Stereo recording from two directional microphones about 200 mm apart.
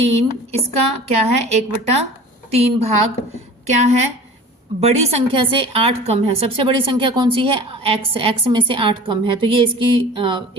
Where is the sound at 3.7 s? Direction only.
35° right (ahead or behind).